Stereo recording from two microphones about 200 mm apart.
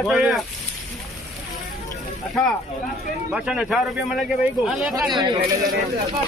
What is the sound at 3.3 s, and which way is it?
Speech, 5° right (ahead or behind).